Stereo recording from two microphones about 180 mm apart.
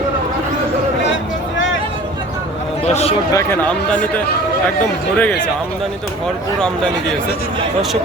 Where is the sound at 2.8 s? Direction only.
35° left (ahead or behind).